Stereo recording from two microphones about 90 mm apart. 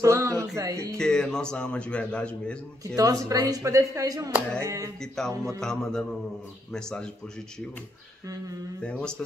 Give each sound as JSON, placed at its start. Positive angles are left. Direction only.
{"t": 0.0, "sound": "music", "side_deg": -35}
{"t": 0.6, "sound": "speech", "side_deg": -40}
{"t": 0.9, "sound": "speech", "side_deg": 5}
{"t": 3.0, "sound": "speech", "side_deg": -40}
{"t": 5.2, "sound": "music", "side_deg": 5}
{"t": 6.7, "sound": "speech", "side_deg": 5}